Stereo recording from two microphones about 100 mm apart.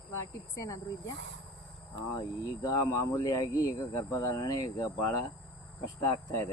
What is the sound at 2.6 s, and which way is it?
Speech, 35° left (ahead or behind).